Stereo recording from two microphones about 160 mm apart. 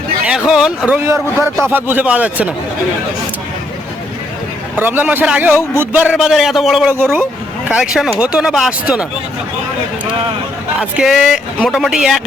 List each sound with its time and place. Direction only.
0.3 s speech: 5° right (ahead or behind)
0.9 s a man's voice: 15° right (ahead or behind)
4.8 s a man's voice: 10° right (ahead or behind)
6.9 s a man's voice: 15° right (ahead or behind)
10.8 s speech: 5° right (ahead or behind)